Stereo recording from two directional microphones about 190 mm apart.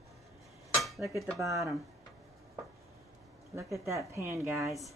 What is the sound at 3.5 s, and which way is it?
A woman's voice, 15° right (ahead or behind).